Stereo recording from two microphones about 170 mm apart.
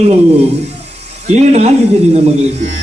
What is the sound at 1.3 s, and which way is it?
Speech, 40° right (ahead or behind).